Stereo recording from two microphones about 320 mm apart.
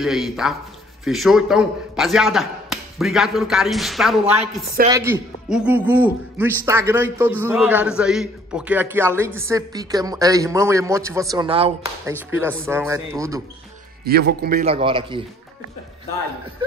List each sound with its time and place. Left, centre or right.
0.0 s a man's voice: centre
4.4 s a woman's voice: centre
14.0 s a man's voice: right